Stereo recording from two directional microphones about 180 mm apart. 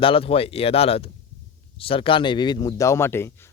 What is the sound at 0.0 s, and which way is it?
Speech, 30° left (ahead or behind).